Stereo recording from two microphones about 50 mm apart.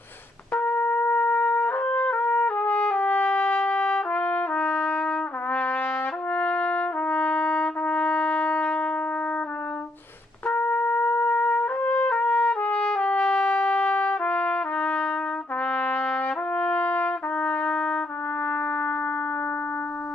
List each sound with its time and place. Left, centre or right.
0.6 s trumpet: left
6.3 s trumpet: left
10.5 s trumpet: left
12.1 s trumpet: left